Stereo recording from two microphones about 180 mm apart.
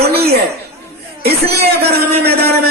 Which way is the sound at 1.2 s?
60° right (ahead or behind).